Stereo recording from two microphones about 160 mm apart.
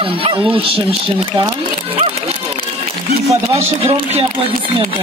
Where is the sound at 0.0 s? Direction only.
30° right (ahead or behind).